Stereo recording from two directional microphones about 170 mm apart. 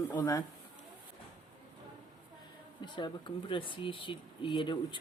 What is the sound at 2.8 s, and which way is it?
Speech, 25° left (ahead or behind).